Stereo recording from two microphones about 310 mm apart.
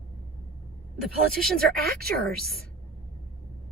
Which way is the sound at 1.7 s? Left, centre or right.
Right.